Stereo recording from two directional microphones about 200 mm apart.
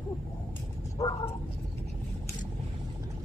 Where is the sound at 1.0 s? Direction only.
15° left (ahead or behind).